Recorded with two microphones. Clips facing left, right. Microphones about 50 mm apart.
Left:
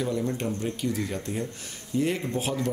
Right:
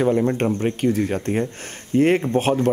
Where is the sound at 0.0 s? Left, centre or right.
Right.